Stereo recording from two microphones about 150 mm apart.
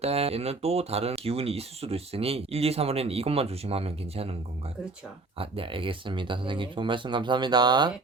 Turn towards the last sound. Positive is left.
turn(degrees=-30)  # may be behind; listen again after turning